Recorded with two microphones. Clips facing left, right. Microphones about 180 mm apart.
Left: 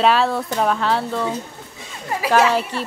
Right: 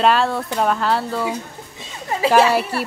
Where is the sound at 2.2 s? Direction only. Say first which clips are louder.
Right 3 dB; 25° right (ahead or behind).